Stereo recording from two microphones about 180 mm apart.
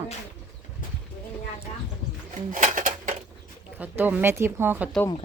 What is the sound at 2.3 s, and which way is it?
Bird, 45° right (ahead or behind).